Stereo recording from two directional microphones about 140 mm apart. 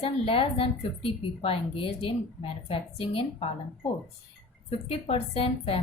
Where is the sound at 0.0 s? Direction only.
40° left (ahead or behind).